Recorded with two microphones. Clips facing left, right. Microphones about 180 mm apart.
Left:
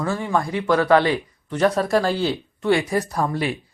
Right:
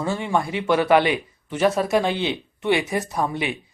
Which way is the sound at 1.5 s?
5° right (ahead or behind).